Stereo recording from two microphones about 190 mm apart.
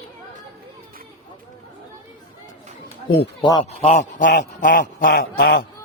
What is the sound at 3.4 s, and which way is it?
A man's voice, 25° left (ahead or behind).